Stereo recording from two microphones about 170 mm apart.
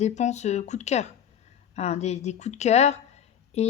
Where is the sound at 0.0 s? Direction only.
45° left (ahead or behind).